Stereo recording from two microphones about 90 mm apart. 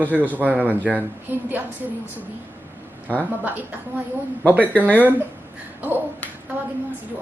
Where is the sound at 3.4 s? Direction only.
20° right (ahead or behind).